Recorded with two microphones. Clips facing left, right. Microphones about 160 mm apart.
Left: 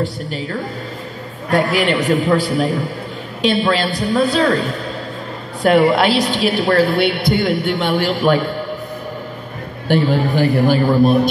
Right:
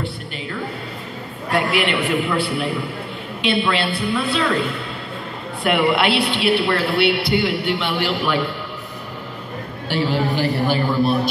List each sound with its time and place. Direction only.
1.5 s a man's voice: 40° left (ahead or behind)
9.8 s a woman's voice: 50° left (ahead or behind)